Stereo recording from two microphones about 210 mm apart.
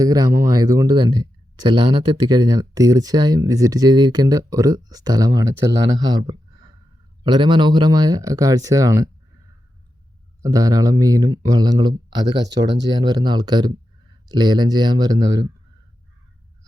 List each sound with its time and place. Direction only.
0.0 s speech: 15° right (ahead or behind)
6.0 s a sound: 20° right (ahead or behind)
7.3 s speech: 20° right (ahead or behind)
10.4 s speech: 15° right (ahead or behind)